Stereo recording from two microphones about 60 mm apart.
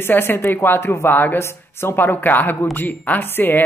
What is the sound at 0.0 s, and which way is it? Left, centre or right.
Speech, left.